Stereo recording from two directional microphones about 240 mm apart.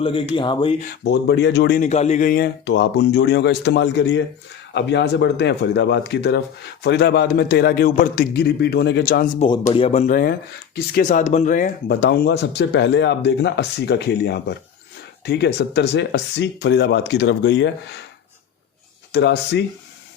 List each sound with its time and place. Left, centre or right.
0.0 s speech: left
0.9 s speech: left
1.8 s a man's voice: left
19.1 s speech: left